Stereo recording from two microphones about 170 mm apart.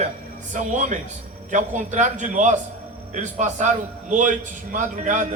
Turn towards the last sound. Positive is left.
turn(degrees=-45)  # may be behind; listen again after turning